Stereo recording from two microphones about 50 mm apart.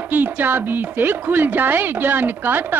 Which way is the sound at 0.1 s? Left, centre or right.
Right.